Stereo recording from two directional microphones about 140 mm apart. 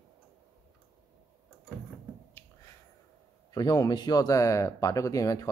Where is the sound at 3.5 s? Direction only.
30° left (ahead or behind).